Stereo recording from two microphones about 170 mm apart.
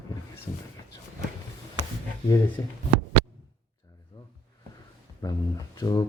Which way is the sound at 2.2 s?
20° left (ahead or behind).